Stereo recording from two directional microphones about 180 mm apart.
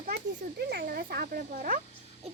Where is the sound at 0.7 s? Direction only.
60° right (ahead or behind).